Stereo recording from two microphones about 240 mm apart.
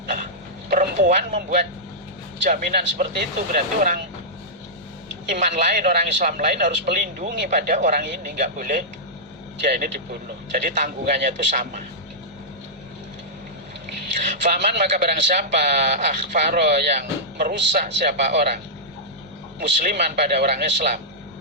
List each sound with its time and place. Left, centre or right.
0.7 s speech: right
5.3 s speech: right
10.5 s speech: right
14.2 s speech: right
19.5 s speech: right